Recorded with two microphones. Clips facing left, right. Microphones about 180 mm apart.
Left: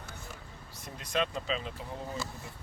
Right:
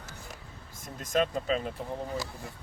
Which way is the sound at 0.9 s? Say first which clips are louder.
Right 4 dB; 45° right (ahead or behind).